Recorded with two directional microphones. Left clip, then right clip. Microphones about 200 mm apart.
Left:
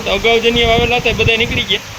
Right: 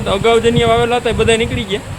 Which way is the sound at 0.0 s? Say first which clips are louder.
Even; 10° right (ahead or behind).